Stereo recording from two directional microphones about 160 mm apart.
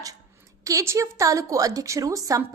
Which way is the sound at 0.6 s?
20° right (ahead or behind).